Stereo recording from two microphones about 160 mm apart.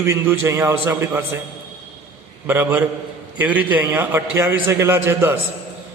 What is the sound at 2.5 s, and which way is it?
A man's voice, 10° right (ahead or behind).